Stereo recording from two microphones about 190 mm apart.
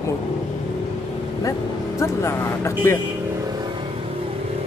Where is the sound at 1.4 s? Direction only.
15° left (ahead or behind).